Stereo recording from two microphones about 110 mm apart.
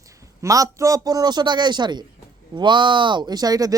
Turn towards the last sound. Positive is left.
turn(degrees=-35)  # may be behind; listen again after turning